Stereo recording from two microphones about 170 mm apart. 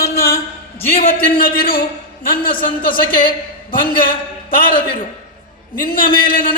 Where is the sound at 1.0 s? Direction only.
60° left (ahead or behind).